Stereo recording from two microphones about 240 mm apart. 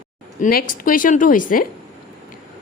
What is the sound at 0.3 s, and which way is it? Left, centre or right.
A woman's voice, left.